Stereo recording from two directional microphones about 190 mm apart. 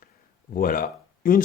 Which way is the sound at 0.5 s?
45° left (ahead or behind).